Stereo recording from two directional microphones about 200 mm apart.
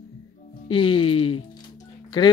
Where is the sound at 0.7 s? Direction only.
25° left (ahead or behind).